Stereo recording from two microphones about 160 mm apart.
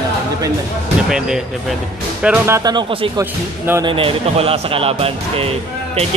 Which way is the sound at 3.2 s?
15° right (ahead or behind).